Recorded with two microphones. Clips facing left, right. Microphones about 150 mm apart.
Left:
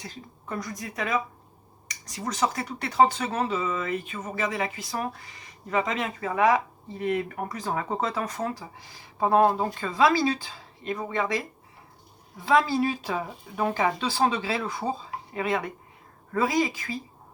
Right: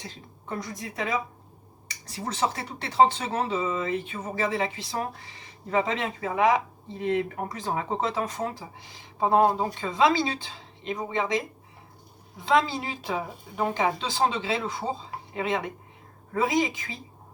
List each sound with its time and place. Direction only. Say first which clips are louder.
0.0 s speech: left 1 dB; 25° right (ahead or behind)
12.5 s speech: left 2 dB; 20° right (ahead or behind)